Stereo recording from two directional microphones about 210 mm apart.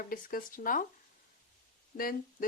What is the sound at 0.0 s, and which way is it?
Speech, 45° left (ahead or behind).